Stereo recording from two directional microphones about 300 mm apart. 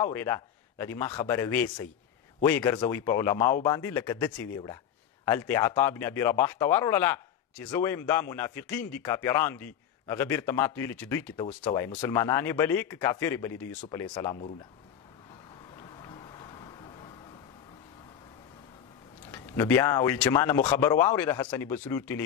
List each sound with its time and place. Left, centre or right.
0.0 s speech: centre
15.8 s a sound: centre
19.3 s speech: centre